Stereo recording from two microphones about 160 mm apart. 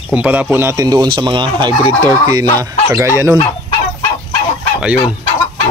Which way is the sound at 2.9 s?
15° right (ahead or behind).